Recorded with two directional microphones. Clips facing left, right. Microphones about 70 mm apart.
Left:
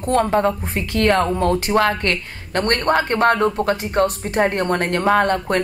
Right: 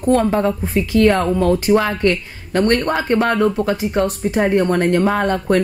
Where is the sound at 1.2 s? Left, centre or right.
Left.